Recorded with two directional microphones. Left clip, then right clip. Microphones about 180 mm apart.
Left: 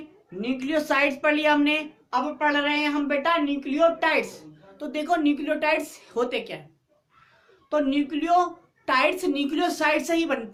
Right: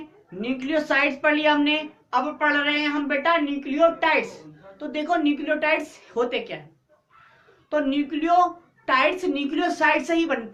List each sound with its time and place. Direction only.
0.4 s a woman's voice: 35° left (ahead or behind)
7.7 s a woman's voice: 40° left (ahead or behind)